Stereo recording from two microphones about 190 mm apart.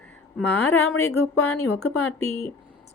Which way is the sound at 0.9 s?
90° left.